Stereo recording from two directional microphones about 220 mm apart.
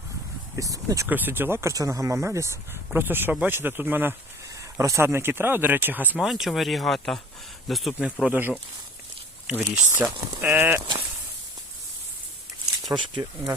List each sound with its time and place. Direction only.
0.5 s speech: 15° right (ahead or behind)
12.9 s speech: 20° right (ahead or behind)